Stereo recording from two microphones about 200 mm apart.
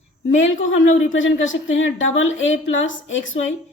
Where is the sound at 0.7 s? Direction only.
75° left (ahead or behind).